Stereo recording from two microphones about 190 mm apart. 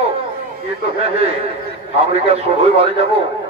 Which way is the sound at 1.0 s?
30° right (ahead or behind).